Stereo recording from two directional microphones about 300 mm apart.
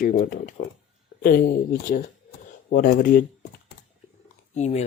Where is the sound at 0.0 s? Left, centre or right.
Left.